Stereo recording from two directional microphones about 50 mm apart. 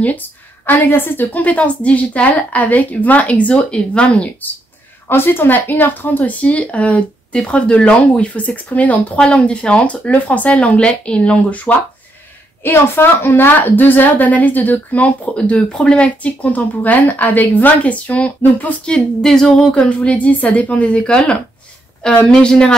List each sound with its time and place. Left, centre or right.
0.7 s a woman's voice: left
5.0 s a woman's voice: left
9.2 s a woman's voice: left
12.6 s a woman's voice: left
18.9 s a sound: centre
20.0 s a woman's voice: left
22.2 s a sound: centre